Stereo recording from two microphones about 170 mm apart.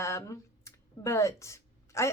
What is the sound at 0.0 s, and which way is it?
A woman's voice, 15° left (ahead or behind).